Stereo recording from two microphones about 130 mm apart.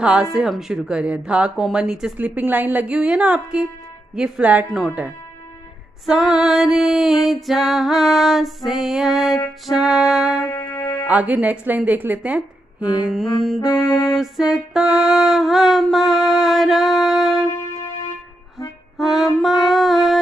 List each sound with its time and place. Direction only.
0.0 s speech: 5° right (ahead or behind)
6.0 s music: centre (ahead or behind)
10.4 s music: 20° left (ahead or behind)
11.1 s speech: 10° right (ahead or behind)
13.0 s music: centre (ahead or behind)
18.9 s music: centre (ahead or behind)